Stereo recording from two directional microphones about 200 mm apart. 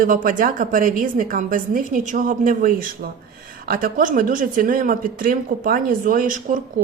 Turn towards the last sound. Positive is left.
turn(degrees=-45)  # may be behind; listen again after turning